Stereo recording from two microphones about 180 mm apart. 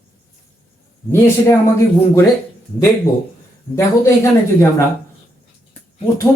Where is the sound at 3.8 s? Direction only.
15° left (ahead or behind).